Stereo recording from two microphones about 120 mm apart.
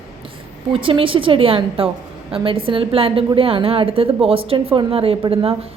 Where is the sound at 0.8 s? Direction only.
45° right (ahead or behind).